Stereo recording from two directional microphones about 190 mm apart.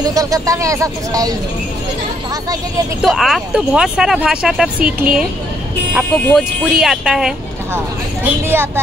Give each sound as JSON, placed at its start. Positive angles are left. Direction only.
{"t": 0.0, "sound": "speech", "side_deg": -20}
{"t": 3.0, "sound": "speech", "side_deg": 0}
{"t": 8.5, "sound": "a woman's voice", "side_deg": -10}